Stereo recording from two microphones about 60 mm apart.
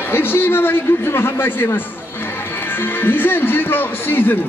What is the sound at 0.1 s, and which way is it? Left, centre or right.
A man's voice, left.